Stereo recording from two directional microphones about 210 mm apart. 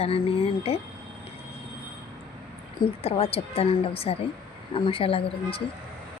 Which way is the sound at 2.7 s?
30° left (ahead or behind).